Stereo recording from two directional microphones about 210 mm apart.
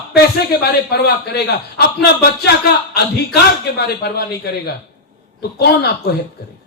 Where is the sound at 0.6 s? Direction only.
50° left (ahead or behind).